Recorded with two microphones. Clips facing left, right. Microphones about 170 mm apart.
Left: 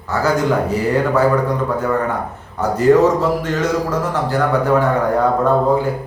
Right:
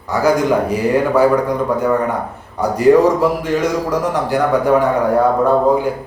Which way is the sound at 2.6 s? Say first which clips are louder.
Right 1 dB; 10° right (ahead or behind).